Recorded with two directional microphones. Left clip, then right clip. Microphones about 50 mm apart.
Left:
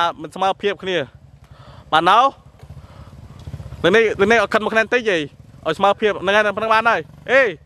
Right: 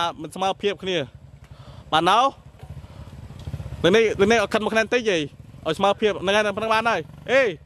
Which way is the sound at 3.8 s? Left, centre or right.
Left.